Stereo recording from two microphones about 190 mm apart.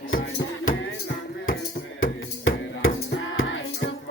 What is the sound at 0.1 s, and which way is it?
Music, 90° left.